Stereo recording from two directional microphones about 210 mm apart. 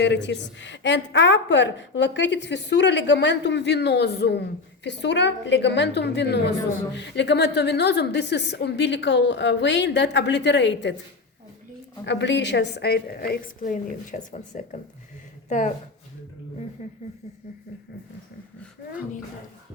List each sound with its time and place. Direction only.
0.0 s a woman's voice: 55° left (ahead or behind)
12.0 s a woman's voice: 55° left (ahead or behind); by 15.7 s 35° left (ahead or behind)
16.8 s speech: 35° left (ahead or behind)